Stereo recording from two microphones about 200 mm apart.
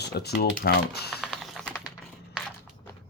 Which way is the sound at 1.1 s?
Centre (ahead or behind).